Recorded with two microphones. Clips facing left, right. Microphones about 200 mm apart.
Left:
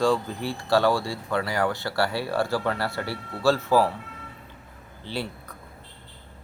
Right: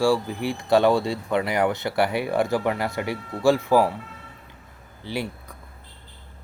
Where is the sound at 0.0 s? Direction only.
10° right (ahead or behind).